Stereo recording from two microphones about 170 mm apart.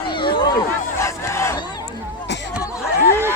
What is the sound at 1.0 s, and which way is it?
Battle cry, 15° left (ahead or behind).